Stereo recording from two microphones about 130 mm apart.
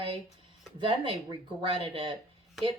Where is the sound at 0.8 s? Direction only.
45° right (ahead or behind).